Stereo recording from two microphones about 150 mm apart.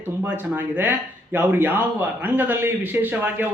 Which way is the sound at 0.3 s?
15° right (ahead or behind).